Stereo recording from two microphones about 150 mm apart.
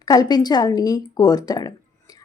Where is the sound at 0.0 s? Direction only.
25° left (ahead or behind).